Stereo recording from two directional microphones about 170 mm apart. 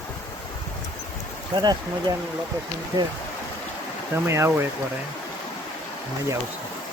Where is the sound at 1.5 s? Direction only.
25° right (ahead or behind).